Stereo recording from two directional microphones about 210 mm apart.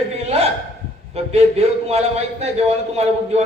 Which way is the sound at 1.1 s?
30° right (ahead or behind).